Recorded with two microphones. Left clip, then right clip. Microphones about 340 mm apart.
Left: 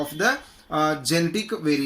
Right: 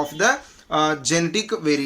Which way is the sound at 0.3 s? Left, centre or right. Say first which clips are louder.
Right 3 dB; centre.